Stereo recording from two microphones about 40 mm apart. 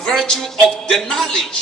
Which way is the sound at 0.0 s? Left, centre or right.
Centre.